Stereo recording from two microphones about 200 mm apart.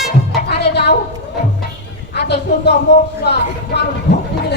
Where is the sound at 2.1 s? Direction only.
55° left (ahead or behind).